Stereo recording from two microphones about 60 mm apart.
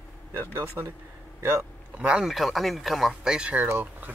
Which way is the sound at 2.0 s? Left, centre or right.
Centre.